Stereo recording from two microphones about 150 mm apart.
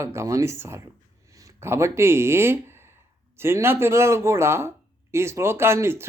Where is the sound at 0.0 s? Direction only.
20° right (ahead or behind).